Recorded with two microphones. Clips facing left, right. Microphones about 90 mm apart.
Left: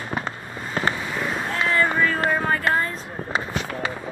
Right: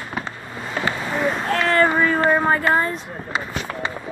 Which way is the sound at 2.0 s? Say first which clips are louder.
Right 4 dB; 25° right (ahead or behind).